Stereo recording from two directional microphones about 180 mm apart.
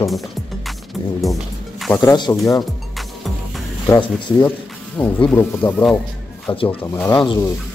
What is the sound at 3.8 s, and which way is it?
Speech, 20° left (ahead or behind).